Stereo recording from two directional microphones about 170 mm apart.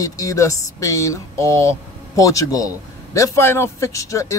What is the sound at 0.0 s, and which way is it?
Speech, 20° left (ahead or behind).